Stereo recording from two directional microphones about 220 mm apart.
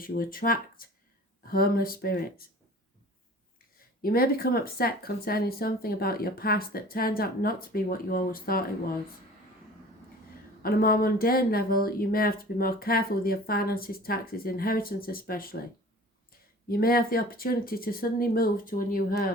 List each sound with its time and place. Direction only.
0.0 s speech: 40° left (ahead or behind)
3.8 s speech: 40° left (ahead or behind)
10.6 s speech: 40° left (ahead or behind)
16.6 s speech: 40° left (ahead or behind)